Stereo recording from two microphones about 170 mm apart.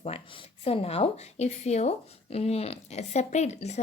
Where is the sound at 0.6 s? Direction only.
35° left (ahead or behind).